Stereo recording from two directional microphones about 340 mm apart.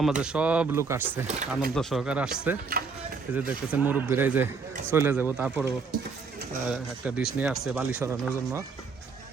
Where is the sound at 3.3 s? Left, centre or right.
Centre.